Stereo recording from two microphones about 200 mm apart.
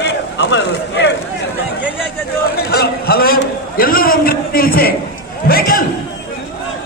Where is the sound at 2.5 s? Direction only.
50° left (ahead or behind).